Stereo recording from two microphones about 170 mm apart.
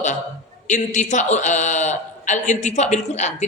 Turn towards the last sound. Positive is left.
turn(degrees=40)  # may be behind; listen again after turning